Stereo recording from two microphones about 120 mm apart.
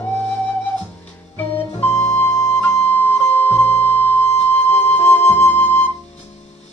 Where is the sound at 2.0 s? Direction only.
20° left (ahead or behind).